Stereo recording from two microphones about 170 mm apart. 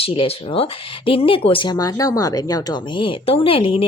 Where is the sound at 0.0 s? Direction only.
35° left (ahead or behind).